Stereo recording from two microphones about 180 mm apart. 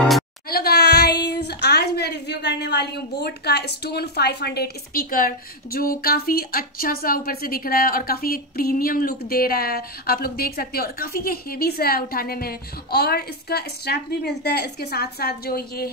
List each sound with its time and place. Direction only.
0.5 s speech: 60° left (ahead or behind)